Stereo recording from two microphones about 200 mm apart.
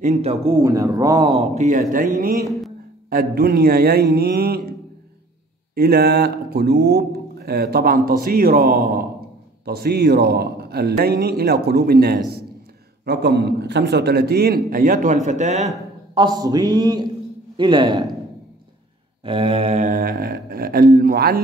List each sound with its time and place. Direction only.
0.0 s speech: 30° right (ahead or behind)
0.6 s speech: 15° right (ahead or behind); by 4.6 s 50° right (ahead or behind)
5.8 s speech: 50° right (ahead or behind); by 15.7 s 35° right (ahead or behind)
16.2 s speech: 20° right (ahead or behind)
19.2 s speech: 30° right (ahead or behind); by 21.4 s 50° right (ahead or behind)